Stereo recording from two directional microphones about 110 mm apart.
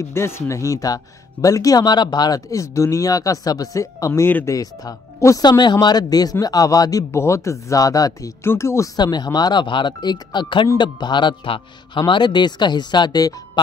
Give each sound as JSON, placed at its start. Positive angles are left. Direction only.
{"t": 0.0, "sound": "speech", "side_deg": 25}
{"t": 8.9, "sound": "speech", "side_deg": 40}